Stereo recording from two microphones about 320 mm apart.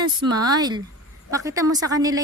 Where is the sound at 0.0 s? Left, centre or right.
Centre.